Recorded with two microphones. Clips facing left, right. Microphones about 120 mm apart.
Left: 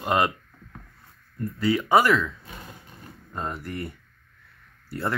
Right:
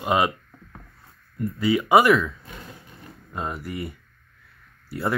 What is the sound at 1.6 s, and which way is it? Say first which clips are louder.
Speech: right 2 dB; 10° right (ahead or behind).